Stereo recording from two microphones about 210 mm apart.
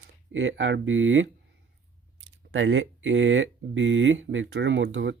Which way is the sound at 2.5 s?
60° right (ahead or behind).